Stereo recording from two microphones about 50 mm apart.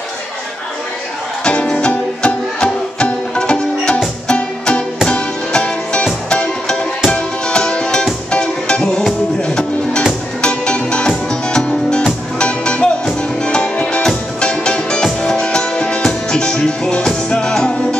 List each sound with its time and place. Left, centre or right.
1.4 s music: left